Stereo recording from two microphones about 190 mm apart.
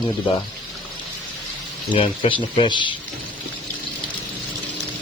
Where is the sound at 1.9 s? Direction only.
25° left (ahead or behind).